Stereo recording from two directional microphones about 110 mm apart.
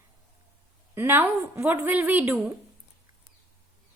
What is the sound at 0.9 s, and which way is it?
A woman's voice, 20° right (ahead or behind).